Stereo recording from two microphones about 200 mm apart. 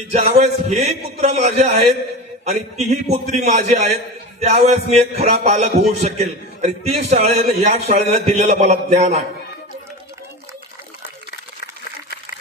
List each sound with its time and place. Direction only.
0.1 s a man's voice: 30° right (ahead or behind)